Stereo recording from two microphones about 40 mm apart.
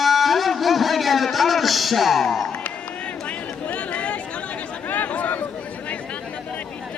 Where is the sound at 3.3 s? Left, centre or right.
Left.